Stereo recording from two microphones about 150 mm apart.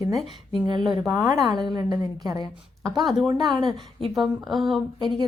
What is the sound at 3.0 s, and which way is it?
Speech, centre (ahead or behind).